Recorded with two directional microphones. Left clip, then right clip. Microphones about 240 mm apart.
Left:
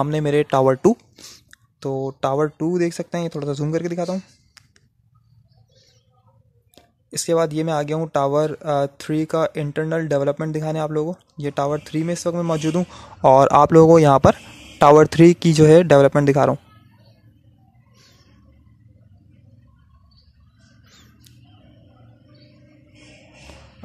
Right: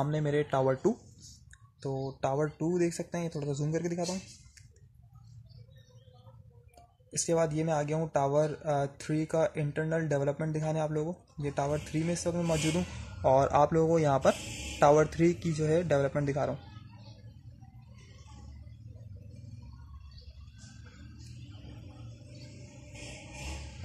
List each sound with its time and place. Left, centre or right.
0.0 s speech: left
6.7 s speech: left